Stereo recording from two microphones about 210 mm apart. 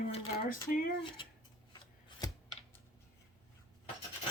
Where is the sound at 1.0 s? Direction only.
25° left (ahead or behind).